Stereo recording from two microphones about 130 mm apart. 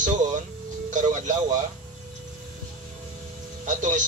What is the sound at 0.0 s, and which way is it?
Music, 70° right (ahead or behind).